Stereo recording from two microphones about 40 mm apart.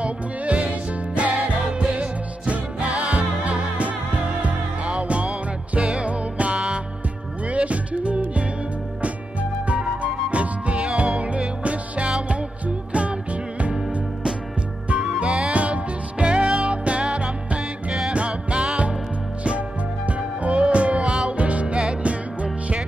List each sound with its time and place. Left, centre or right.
0.0 s music: right
15.1 s music: right
20.1 s music: right